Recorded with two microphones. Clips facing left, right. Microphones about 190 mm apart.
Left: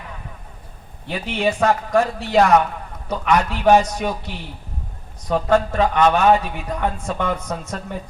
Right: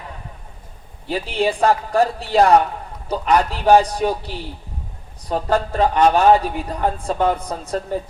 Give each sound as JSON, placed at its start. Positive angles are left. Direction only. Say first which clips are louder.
{"t": 1.1, "sound": "a man's voice", "louder": "right 1 dB", "side_deg": -35}